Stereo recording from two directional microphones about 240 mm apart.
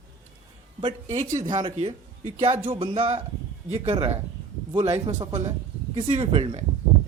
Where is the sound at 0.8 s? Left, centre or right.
Right.